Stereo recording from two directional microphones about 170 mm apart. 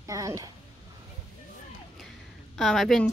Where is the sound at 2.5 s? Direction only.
Centre (ahead or behind).